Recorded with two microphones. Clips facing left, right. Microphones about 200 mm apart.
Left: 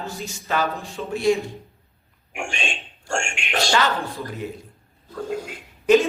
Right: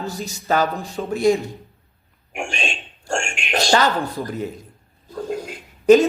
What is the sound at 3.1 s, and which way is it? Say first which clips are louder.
Speech: right 2 dB; 40° right (ahead or behind).